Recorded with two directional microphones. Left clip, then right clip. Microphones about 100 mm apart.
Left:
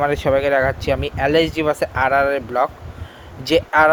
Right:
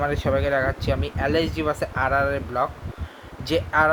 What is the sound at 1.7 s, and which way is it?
Speech, 50° left (ahead or behind).